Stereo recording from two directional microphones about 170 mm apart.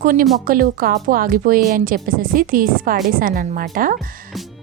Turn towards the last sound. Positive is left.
turn(degrees=-60)  # may be behind; listen again after turning